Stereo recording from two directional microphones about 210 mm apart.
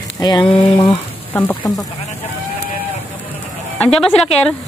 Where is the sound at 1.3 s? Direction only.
10° left (ahead or behind).